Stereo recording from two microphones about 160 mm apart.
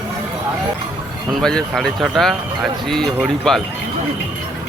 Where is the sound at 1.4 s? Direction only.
5° left (ahead or behind).